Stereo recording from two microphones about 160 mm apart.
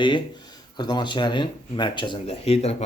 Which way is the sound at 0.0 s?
30° left (ahead or behind).